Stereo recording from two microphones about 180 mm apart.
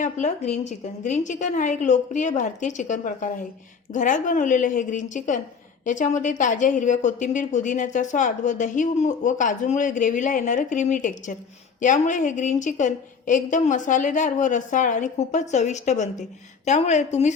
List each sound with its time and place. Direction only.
0.0 s a woman's voice: 40° left (ahead or behind)